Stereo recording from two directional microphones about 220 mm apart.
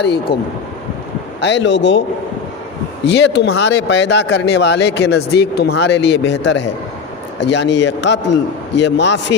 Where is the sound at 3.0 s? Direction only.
50° left (ahead or behind).